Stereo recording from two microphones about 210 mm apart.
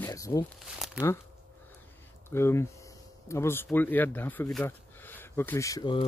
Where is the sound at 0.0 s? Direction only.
15° left (ahead or behind).